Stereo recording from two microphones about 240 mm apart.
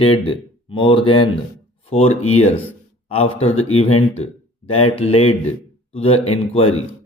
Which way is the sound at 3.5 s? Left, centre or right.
Left.